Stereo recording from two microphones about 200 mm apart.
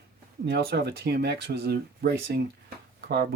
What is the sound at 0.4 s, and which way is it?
Speech, 55° right (ahead or behind).